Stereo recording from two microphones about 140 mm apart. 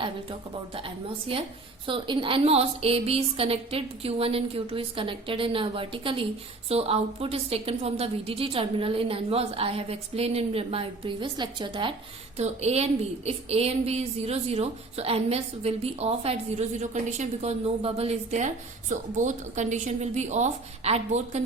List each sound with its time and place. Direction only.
1.3 s a woman's voice: 40° right (ahead or behind)
12.4 s a woman's voice: 50° right (ahead or behind)